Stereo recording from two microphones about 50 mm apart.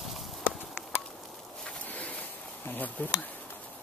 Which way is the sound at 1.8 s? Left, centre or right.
Left.